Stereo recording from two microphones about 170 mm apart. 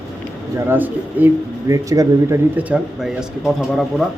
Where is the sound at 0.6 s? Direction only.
10° right (ahead or behind).